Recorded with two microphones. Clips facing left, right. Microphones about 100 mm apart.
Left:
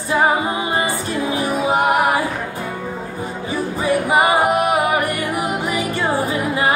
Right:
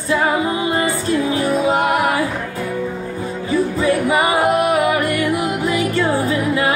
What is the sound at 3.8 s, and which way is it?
Music, 20° left (ahead or behind).